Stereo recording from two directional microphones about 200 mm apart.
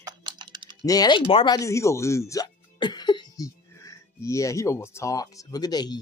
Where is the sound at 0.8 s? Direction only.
20° left (ahead or behind).